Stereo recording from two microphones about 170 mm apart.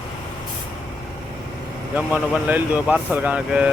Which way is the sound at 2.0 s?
10° right (ahead or behind).